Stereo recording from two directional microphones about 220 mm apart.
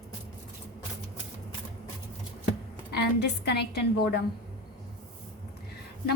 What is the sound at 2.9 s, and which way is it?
Speech, 50° left (ahead or behind).